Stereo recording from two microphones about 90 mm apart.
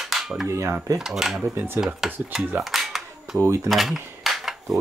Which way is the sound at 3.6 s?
Centre (ahead or behind).